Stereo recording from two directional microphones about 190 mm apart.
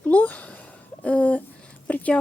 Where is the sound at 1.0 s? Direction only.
5° left (ahead or behind).